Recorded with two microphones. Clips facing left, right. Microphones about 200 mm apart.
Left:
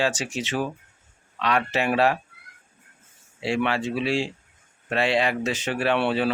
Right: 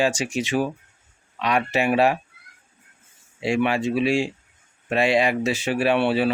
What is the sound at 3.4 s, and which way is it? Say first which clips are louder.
Speech: right 3 dB; 15° right (ahead or behind).